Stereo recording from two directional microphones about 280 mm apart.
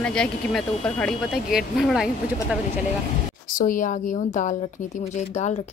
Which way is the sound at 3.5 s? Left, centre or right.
Left.